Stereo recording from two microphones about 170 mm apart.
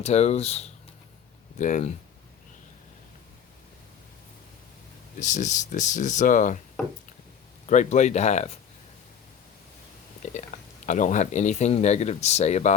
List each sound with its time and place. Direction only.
0.0 s speech: 40° left (ahead or behind)
5.2 s speech: 45° left (ahead or behind)
7.7 s speech: 45° left (ahead or behind)
10.3 s speech: 45° left (ahead or behind)